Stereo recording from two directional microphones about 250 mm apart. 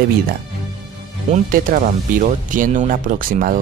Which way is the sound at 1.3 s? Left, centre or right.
Right.